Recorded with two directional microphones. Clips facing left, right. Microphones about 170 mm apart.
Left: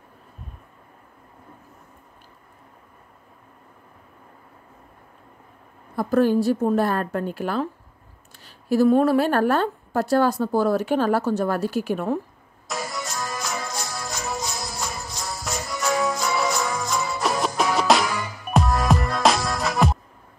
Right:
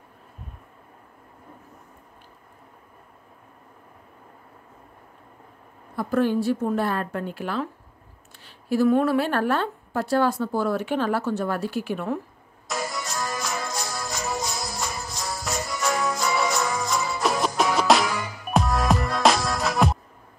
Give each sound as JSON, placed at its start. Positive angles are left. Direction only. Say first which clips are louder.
{"t": 5.9, "sound": "a woman's voice", "louder": "left 3 dB", "side_deg": 40}
{"t": 12.6, "sound": "music", "louder": "even", "side_deg": 0}